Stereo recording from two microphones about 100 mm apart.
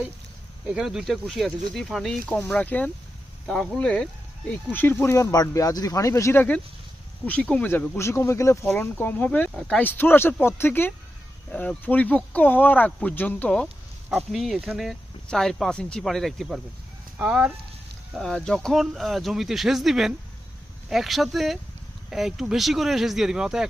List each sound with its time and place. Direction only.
0.7 s speech: 5° right (ahead or behind)
2.5 s speech: 15° left (ahead or behind); by 6.4 s 30° left (ahead or behind)
7.3 s speech: 15° left (ahead or behind)
7.9 s speech: 25° left (ahead or behind)
14.2 s speech: centre (ahead or behind)
17.2 s speech: 10° right (ahead or behind)
18.1 s speech: 5° left (ahead or behind)